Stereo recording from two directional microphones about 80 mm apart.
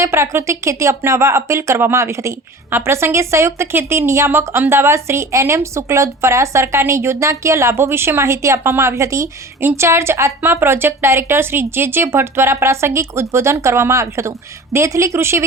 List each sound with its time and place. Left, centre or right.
0.0 s speech: right